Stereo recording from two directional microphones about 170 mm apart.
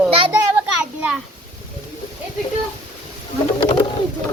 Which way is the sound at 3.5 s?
25° left (ahead or behind).